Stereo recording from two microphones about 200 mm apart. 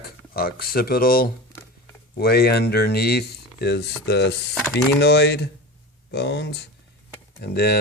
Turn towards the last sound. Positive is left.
turn(degrees=55)  # may be behind; listen again after turning